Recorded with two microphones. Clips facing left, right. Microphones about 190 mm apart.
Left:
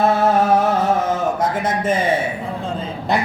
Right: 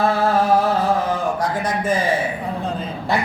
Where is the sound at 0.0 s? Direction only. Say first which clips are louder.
Left 2 dB; 20° left (ahead or behind).